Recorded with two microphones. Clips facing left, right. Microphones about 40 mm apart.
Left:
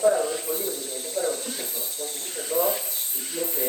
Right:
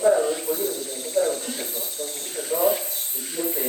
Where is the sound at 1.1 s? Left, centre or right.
Right.